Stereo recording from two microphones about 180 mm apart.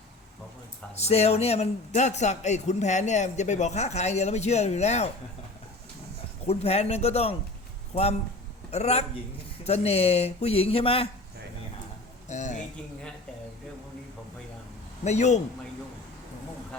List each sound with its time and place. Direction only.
0.9 s a man's voice: 35° left (ahead or behind)
6.4 s a man's voice: 35° left (ahead or behind)
12.3 s a sound: 45° left (ahead or behind)
15.0 s a man's voice: 40° left (ahead or behind)